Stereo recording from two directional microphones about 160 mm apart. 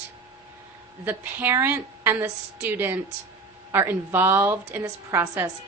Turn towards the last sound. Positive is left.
turn(degrees=-15)  # may be behind; listen again after turning